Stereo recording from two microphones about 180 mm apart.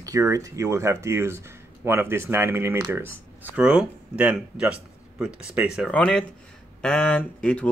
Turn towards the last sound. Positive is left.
turn(degrees=5)  # may be behind; listen again after turning